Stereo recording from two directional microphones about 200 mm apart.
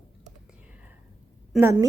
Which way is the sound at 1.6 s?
15° right (ahead or behind).